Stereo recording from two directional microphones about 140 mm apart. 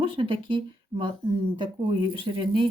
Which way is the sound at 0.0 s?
35° right (ahead or behind).